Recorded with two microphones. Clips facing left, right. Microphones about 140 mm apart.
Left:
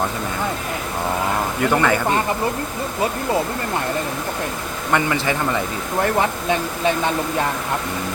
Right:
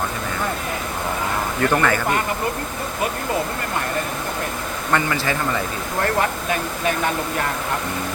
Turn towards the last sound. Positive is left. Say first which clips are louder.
# left 3 dB
turn(degrees=20)  # may be behind; listen again after turning